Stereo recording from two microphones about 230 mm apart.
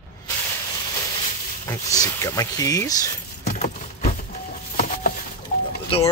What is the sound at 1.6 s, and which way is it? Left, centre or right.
Speech, centre.